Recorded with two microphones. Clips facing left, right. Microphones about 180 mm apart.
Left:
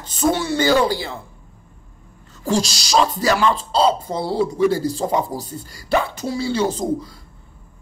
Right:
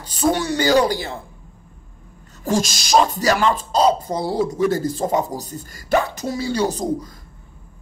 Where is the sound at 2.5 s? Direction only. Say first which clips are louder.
Right 1 dB; 50° right (ahead or behind).